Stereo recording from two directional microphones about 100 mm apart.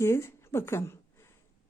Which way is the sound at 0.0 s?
25° left (ahead or behind).